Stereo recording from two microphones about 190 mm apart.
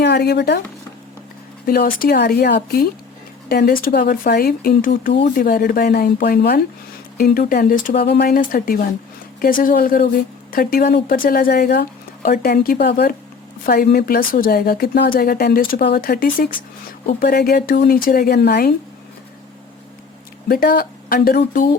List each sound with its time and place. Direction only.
0.0 s speech: 60° left (ahead or behind)
1.6 s speech: 50° left (ahead or behind)
20.5 s speech: 50° left (ahead or behind)